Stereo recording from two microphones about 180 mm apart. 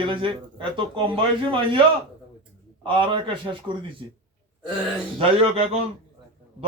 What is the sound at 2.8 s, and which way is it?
A man's voice, 25° right (ahead or behind).